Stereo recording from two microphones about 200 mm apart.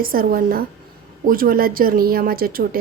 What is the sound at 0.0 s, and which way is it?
A woman's voice, 45° right (ahead or behind).